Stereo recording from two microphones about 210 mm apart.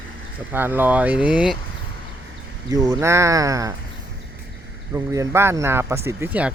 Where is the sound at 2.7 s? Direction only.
15° right (ahead or behind).